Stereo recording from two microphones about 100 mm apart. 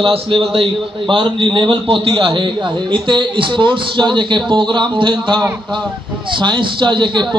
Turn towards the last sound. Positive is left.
turn(degrees=-50)  # may be behind; listen again after turning